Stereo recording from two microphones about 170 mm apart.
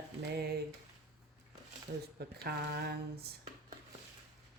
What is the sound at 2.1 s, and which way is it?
Speech, 70° right (ahead or behind).